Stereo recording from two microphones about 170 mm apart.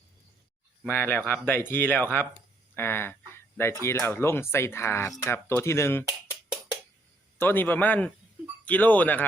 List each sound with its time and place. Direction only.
0.9 s speech: 10° left (ahead or behind)
7.3 s speech: 10° left (ahead or behind)